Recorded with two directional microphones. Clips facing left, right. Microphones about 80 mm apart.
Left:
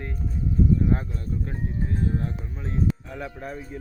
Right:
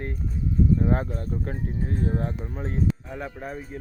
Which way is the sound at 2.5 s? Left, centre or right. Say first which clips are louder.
Right 2 dB; right.